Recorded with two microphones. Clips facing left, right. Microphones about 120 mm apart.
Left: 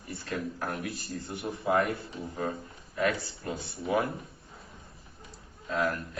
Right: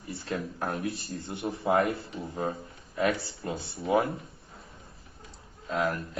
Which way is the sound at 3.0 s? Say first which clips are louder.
Right 1 dB; 25° right (ahead or behind).